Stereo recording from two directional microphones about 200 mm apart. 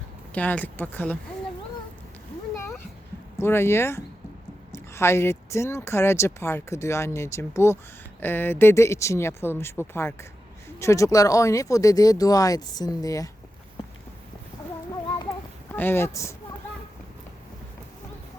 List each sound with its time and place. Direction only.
0.3 s speech: 10° left (ahead or behind)
2.6 s a sound: 10° left (ahead or behind)
3.4 s speech: 10° left (ahead or behind)
15.7 s speech: 10° left (ahead or behind)